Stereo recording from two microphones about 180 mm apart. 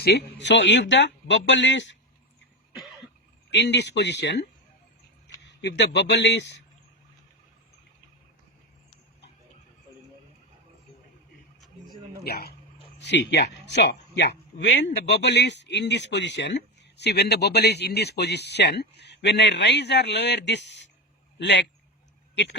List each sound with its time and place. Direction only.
0.0 s speech: 75° left (ahead or behind)
3.5 s speech: 70° left (ahead or behind)
5.5 s speech: 70° left (ahead or behind)
12.2 s speech: 60° left (ahead or behind)
13.0 s a man's voice: 70° left (ahead or behind)